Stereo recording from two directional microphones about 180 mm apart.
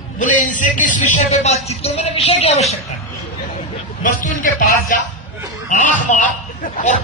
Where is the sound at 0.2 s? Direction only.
45° left (ahead or behind).